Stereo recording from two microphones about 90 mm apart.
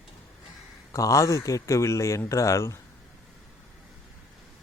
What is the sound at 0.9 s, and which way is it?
Speech, 40° left (ahead or behind).